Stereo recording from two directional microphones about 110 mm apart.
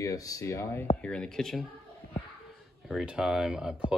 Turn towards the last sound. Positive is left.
turn(degrees=-5)  # may be behind; listen again after turning